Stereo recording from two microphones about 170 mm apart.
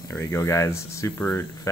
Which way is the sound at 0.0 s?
20° left (ahead or behind).